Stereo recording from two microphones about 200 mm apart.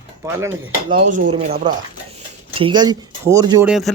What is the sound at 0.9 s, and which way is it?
Speech, 45° right (ahead or behind).